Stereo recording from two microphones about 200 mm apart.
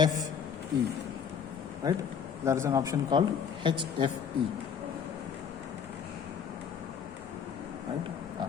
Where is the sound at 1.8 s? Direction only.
15° right (ahead or behind).